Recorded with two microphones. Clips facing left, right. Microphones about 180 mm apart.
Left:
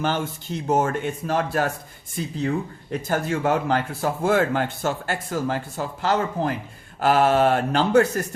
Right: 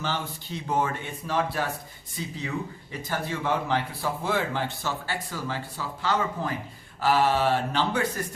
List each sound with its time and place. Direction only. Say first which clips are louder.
0.0 s a man's voice: left 6 dB; 50° left (ahead or behind)